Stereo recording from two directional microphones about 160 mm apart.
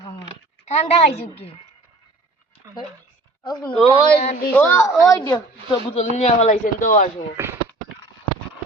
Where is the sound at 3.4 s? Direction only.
25° left (ahead or behind).